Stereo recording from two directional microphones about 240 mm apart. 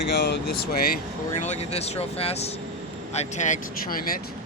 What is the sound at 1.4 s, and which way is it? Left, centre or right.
Speech, left.